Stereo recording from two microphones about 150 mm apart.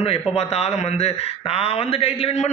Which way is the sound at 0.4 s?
45° left (ahead or behind).